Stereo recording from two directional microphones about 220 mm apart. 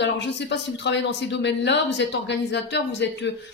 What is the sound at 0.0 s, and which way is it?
Speech, 50° left (ahead or behind).